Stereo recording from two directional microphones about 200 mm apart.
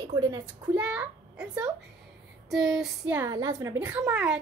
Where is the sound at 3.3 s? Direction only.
20° right (ahead or behind).